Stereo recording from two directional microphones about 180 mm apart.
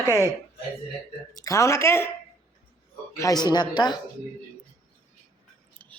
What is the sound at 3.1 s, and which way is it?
Speech, 20° left (ahead or behind).